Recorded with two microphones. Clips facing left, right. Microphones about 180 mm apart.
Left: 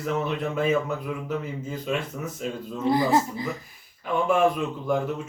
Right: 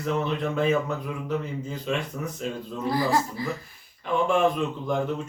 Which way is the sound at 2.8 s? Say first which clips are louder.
Left 3 dB; 20° left (ahead or behind).